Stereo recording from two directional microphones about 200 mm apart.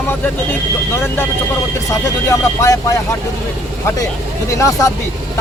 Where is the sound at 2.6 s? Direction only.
15° left (ahead or behind).